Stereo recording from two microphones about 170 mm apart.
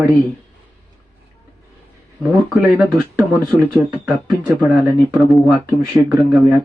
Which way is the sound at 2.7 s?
15° right (ahead or behind).